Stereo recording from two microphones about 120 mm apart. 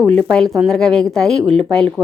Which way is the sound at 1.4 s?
55° right (ahead or behind).